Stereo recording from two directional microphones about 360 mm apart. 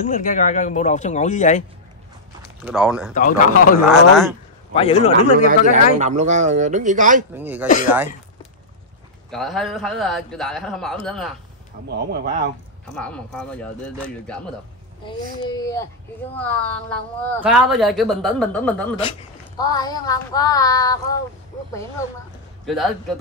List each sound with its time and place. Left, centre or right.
0.0 s speech: left
2.6 s speech: centre
3.2 s speech: left
3.9 s speech: centre
4.7 s child singing: centre
5.5 s speech: centre
7.3 s speech: centre
9.3 s speech: centre
11.9 s speech: right
12.9 s speech: centre
15.0 s child singing: centre
16.3 s speech: centre
19.6 s child singing: centre
22.7 s speech: centre